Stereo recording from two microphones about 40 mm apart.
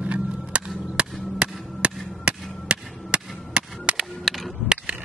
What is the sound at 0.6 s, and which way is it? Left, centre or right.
Chop, right.